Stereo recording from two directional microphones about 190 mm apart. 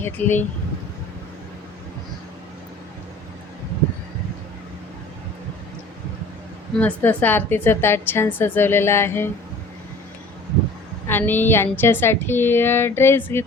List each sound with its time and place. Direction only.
0.0 s a woman's voice: 10° left (ahead or behind)
6.7 s a woman's voice: 5° left (ahead or behind)
11.1 s a woman's voice: 10° left (ahead or behind)